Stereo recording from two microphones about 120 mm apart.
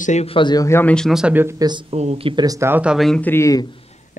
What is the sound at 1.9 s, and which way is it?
Speech, 60° right (ahead or behind).